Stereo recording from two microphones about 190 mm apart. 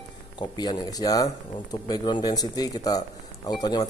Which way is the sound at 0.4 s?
20° left (ahead or behind).